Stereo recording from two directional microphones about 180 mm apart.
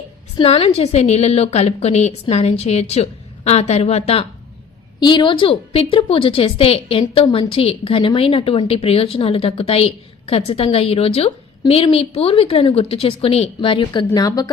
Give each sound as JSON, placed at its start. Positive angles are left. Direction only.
{"t": 0.3, "sound": "a woman's voice", "side_deg": 30}